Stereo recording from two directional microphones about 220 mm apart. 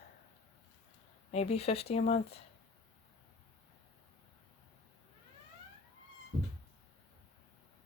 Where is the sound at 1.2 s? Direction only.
30° left (ahead or behind).